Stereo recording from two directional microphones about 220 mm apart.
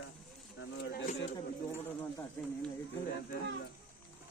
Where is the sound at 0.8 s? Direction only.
45° left (ahead or behind).